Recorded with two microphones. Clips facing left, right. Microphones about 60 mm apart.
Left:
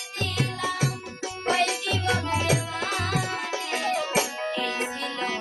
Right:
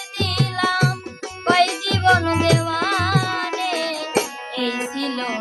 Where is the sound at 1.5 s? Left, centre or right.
Right.